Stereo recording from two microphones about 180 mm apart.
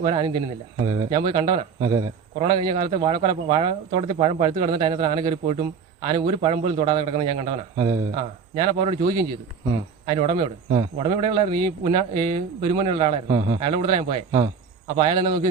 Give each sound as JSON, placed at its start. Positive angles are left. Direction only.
{"t": 0.0, "sound": "a man's voice", "side_deg": -30}